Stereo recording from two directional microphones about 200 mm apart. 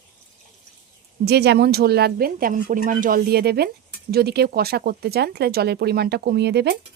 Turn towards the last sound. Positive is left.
turn(degrees=-55)  # may be behind; listen again after turning